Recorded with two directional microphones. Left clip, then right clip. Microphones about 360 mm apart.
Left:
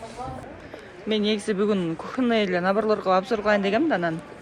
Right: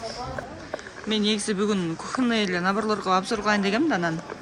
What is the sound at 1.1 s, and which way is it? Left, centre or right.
Speech, centre.